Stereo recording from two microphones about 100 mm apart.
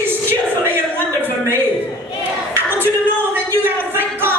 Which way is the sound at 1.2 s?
25° right (ahead or behind).